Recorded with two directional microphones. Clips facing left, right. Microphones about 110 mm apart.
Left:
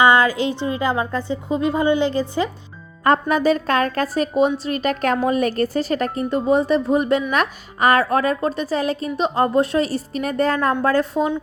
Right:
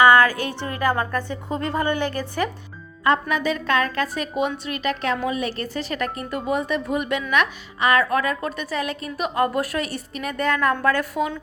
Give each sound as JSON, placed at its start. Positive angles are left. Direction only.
{"t": 0.0, "sound": "a woman's voice", "side_deg": 20}
{"t": 3.0, "sound": "a woman's voice", "side_deg": 40}